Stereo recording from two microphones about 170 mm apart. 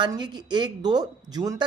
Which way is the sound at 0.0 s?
25° right (ahead or behind).